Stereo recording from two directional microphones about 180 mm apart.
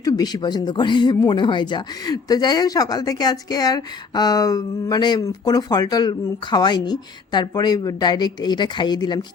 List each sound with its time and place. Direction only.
0.0 s speech: 20° left (ahead or behind)